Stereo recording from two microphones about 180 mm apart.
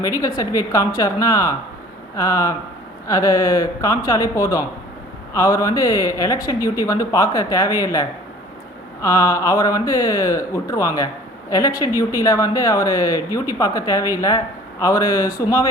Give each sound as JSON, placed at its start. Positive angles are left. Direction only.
{"t": 0.2, "sound": "speech", "side_deg": 20}